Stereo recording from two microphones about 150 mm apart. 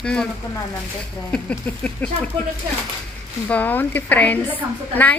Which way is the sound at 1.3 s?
10° left (ahead or behind).